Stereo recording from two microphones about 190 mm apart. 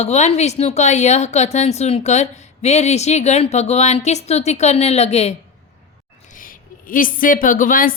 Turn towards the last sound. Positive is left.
turn(degrees=45)  # may be behind; listen again after turning